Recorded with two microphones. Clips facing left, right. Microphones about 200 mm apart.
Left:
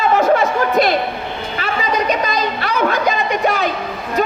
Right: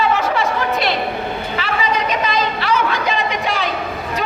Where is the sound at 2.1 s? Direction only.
45° left (ahead or behind).